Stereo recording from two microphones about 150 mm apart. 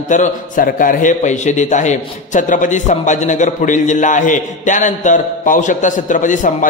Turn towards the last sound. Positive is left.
turn(degrees=60)  # may be behind; listen again after turning